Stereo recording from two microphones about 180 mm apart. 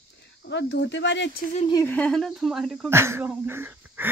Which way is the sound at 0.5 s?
75° left (ahead or behind).